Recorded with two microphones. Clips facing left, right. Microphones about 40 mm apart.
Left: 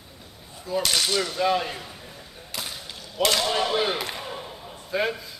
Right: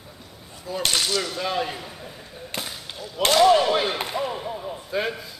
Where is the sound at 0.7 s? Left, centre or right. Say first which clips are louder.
Even; centre.